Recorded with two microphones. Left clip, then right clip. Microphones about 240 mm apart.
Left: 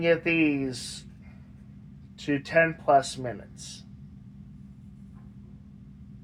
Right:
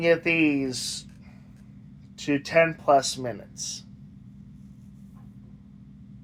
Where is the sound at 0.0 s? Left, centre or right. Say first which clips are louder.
Right 2 dB; right.